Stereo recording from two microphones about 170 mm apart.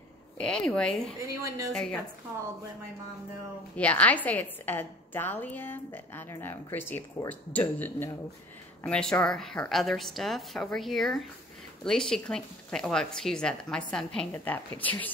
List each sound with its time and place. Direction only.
0.4 s speech: 5° left (ahead or behind)
1.2 s a woman's voice: 20° right (ahead or behind)
1.7 s speech: 5° left (ahead or behind)
3.7 s a woman's voice: 10° left (ahead or behind)